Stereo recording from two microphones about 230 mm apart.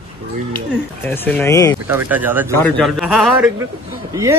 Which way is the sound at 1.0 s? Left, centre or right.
Centre.